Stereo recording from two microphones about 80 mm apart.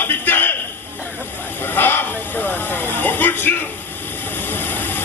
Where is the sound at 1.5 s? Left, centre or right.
Left.